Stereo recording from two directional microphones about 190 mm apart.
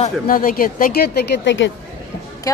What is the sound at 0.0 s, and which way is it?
A woman's voice, 50° left (ahead or behind).